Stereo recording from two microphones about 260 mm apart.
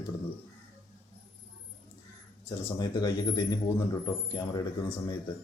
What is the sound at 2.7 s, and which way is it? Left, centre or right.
A man's voice, centre.